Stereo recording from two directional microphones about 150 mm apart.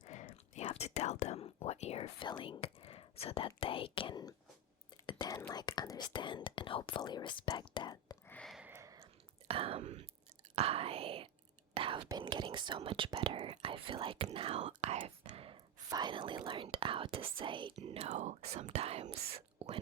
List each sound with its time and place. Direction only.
0.1 s whispering: 50° left (ahead or behind)
0.7 s speech: 45° left (ahead or behind); by 8.1 s 30° left (ahead or behind)
8.3 s a sound: 5° left (ahead or behind)
8.5 s a sound: 10° right (ahead or behind)
9.5 s speech: 40° right (ahead or behind)
11.7 s whispering: 35° right (ahead or behind)
12.0 s speech: 30° right (ahead or behind)
15.9 s speech: 30° right (ahead or behind)